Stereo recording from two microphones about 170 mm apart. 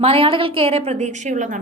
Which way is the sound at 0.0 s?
35° right (ahead or behind).